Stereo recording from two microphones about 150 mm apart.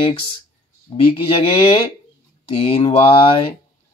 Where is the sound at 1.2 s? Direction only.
40° left (ahead or behind).